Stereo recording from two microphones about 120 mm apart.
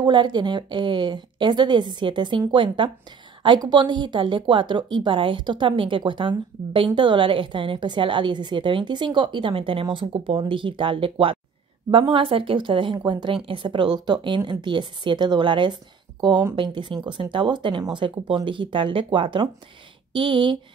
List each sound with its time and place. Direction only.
0.0 s a woman's voice: 35° right (ahead or behind)